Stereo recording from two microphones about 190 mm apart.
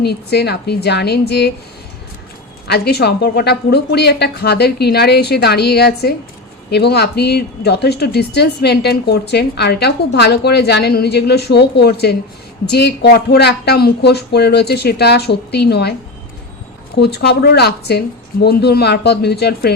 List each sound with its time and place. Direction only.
0.0 s speech: 60° left (ahead or behind)
2.6 s speech: 55° left (ahead or behind)